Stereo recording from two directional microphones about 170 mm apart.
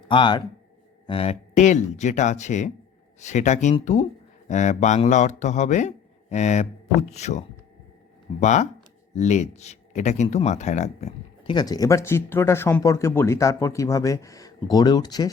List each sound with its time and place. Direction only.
0.1 s speech: 30° left (ahead or behind)
11.5 s speech: 20° left (ahead or behind)